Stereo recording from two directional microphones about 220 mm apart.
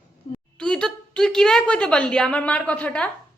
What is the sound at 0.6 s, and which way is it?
A woman's voice, 5° left (ahead or behind).